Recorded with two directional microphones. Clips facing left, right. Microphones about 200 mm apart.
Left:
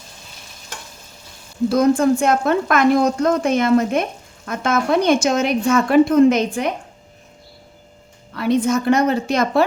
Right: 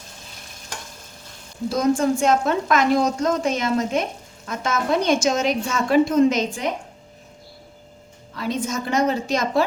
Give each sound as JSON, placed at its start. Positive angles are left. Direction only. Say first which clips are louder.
{"t": 1.7, "sound": "a woman's voice", "louder": "left 4 dB", "side_deg": 60}
{"t": 8.4, "sound": "a woman's voice", "louder": "left 8 dB", "side_deg": 60}